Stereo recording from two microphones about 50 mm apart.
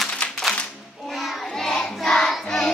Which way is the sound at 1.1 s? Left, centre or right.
Centre.